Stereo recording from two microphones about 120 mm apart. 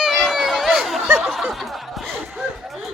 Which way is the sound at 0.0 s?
Centre (ahead or behind).